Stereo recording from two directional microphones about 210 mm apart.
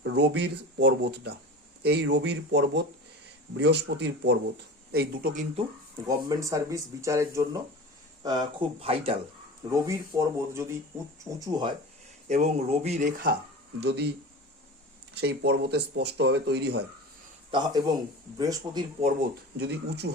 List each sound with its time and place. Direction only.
0.0 s speech: 55° right (ahead or behind); by 5.6 s 40° right (ahead or behind)
6.1 s speech: 15° right (ahead or behind)
9.7 s speech: 15° right (ahead or behind)
12.3 s speech: 30° right (ahead or behind)
13.7 s speech: 50° right (ahead or behind)
15.1 s speech: 55° right (ahead or behind)
17.5 s speech: 25° right (ahead or behind)
19.5 s speech: 50° right (ahead or behind)